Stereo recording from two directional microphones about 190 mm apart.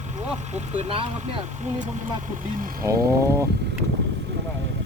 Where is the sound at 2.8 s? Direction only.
15° right (ahead or behind).